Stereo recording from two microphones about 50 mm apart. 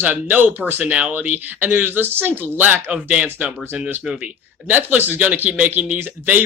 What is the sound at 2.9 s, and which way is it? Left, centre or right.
Speech, right.